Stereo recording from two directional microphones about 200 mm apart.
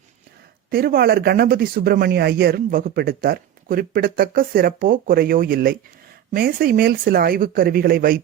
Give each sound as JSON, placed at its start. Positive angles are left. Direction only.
{"t": 0.7, "sound": "speech", "side_deg": -50}